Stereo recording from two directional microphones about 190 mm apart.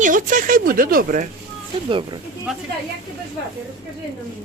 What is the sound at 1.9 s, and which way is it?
Speech, 25° right (ahead or behind).